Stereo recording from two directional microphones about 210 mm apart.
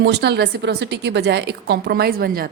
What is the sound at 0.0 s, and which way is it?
A woman's voice, 50° right (ahead or behind).